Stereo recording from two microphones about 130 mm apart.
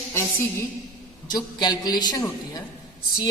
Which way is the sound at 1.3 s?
30° left (ahead or behind).